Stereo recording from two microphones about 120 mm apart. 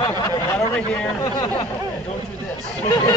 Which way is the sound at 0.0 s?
30° left (ahead or behind).